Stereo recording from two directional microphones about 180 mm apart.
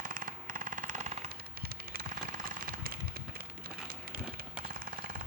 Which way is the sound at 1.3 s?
55° right (ahead or behind).